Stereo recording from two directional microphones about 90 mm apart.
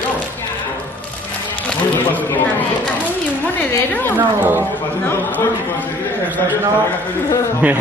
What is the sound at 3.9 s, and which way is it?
Speech, 20° left (ahead or behind).